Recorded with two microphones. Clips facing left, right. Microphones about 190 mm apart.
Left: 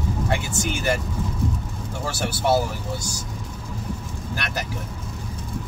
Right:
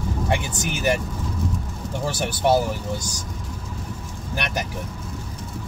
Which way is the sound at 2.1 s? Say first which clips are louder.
Right 1 dB; 15° right (ahead or behind).